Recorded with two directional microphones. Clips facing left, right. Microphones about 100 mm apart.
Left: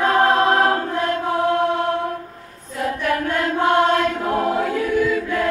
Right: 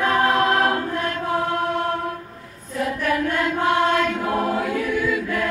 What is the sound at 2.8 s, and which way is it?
Choir, 35° left (ahead or behind).